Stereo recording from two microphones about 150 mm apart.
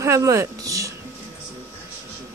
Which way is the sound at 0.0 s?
20° right (ahead or behind).